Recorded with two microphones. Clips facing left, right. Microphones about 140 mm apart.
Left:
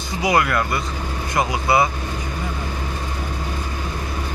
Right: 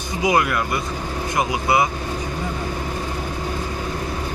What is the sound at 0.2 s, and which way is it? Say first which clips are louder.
Speech: even; 15° right (ahead or behind).